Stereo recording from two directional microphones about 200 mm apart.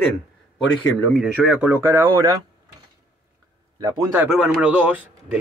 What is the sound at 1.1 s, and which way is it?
Speech, 5° right (ahead or behind).